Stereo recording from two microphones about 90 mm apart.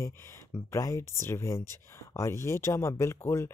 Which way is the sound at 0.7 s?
35° left (ahead or behind).